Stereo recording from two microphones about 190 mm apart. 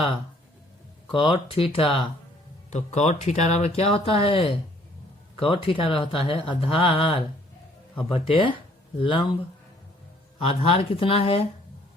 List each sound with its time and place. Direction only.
1.1 s speech: 25° left (ahead or behind)
10.4 s speech: 30° left (ahead or behind)